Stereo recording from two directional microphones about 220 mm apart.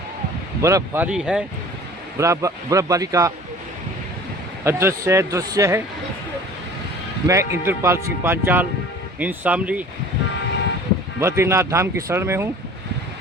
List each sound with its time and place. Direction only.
0.6 s a man's voice: 10° right (ahead or behind)
4.6 s a man's voice: 10° right (ahead or behind)
7.3 s a man's voice: 15° right (ahead or behind)
11.2 s a man's voice: 10° right (ahead or behind)